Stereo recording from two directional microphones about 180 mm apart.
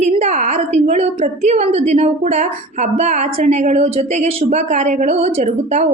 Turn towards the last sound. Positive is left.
turn(degrees=-40)  # may be behind; listen again after turning